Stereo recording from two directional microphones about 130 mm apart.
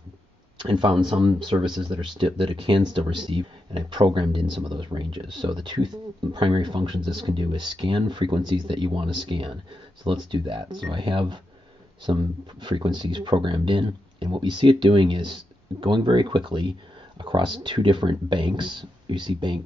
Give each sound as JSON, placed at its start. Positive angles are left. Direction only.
{"t": 0.6, "sound": "speech", "side_deg": -35}